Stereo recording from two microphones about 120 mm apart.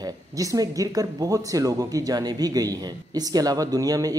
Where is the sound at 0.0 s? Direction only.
30° right (ahead or behind).